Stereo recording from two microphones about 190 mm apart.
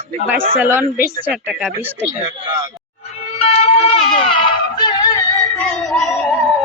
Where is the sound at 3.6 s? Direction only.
30° left (ahead or behind).